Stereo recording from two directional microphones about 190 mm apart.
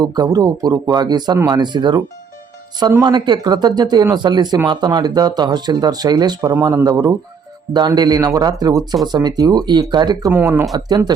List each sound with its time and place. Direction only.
0.0 s speech: 20° right (ahead or behind)
10.3 s speech: 10° right (ahead or behind)
10.8 s speech: 20° right (ahead or behind)